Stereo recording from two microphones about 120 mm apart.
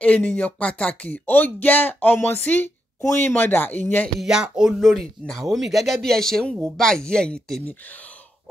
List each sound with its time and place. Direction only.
0.0 s speech: 15° left (ahead or behind)
4.2 s speech: 5° right (ahead or behind)